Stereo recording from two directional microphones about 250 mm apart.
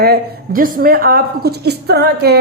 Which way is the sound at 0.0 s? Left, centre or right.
Right.